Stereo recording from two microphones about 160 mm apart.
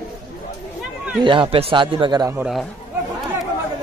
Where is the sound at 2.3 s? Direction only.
Centre (ahead or behind).